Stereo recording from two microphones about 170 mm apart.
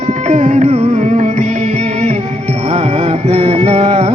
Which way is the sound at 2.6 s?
40° right (ahead or behind).